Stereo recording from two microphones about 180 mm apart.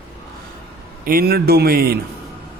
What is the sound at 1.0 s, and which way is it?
Mantra, 55° right (ahead or behind).